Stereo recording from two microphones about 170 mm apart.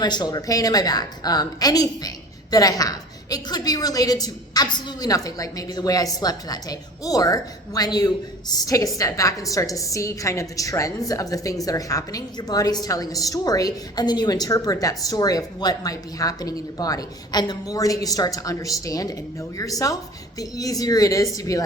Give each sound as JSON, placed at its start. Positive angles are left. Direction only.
{"t": 0.0, "sound": "a woman's voice", "side_deg": 25}